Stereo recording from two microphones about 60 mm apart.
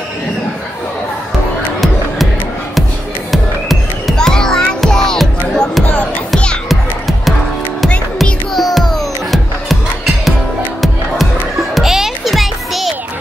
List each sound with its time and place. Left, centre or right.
4.2 s music: centre
6.3 s music: centre
6.7 s music: centre
11.7 s music: centre